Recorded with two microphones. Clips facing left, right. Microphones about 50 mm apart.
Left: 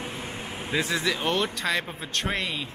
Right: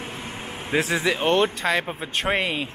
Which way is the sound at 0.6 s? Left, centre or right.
Right.